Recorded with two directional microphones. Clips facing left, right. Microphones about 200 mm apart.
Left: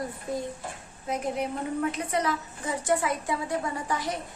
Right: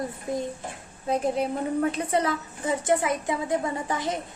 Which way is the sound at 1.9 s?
30° right (ahead or behind).